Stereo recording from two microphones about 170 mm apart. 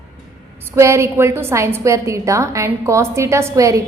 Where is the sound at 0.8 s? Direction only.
15° right (ahead or behind).